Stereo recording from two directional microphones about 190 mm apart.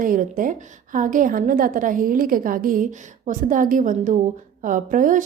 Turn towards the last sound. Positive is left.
turn(degrees=-45)  # may be behind; listen again after turning